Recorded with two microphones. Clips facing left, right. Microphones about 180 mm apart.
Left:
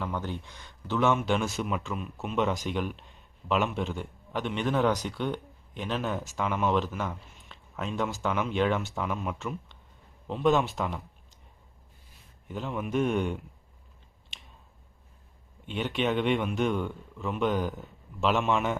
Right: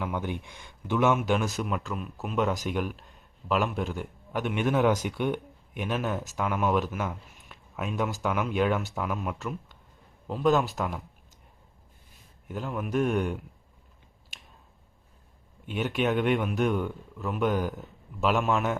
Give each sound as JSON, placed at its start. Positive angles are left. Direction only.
{"t": 0.0, "sound": "speech", "side_deg": -10}
{"t": 12.5, "sound": "speech", "side_deg": -5}
{"t": 15.6, "sound": "speech", "side_deg": -5}